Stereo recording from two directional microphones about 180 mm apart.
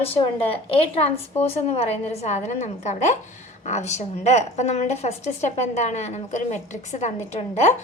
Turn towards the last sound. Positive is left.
turn(degrees=40)  # may be behind; listen again after turning